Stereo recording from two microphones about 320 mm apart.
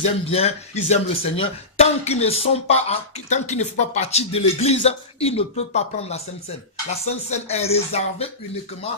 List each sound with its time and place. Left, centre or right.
0.3 s speech: centre